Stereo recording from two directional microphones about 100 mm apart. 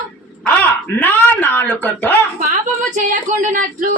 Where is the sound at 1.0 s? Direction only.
20° left (ahead or behind).